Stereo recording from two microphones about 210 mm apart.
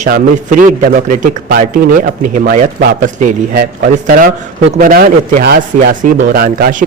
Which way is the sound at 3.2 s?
40° right (ahead or behind).